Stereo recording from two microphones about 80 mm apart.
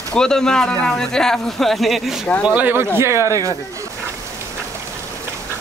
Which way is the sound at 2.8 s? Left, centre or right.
Right.